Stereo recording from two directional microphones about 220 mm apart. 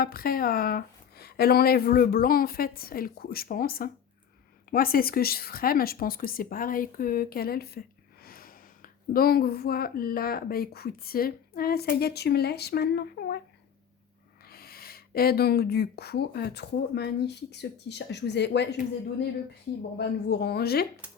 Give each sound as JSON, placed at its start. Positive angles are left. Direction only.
{"t": 0.0, "sound": "speech", "side_deg": 40}
{"t": 14.4, "sound": "speech", "side_deg": 45}
{"t": 20.0, "sound": "speech", "side_deg": 50}